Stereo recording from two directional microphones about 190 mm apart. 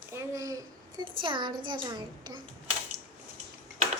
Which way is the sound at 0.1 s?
15° right (ahead or behind).